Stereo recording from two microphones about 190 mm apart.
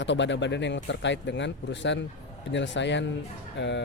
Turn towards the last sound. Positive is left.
turn(degrees=70)  # may be behind; listen again after turning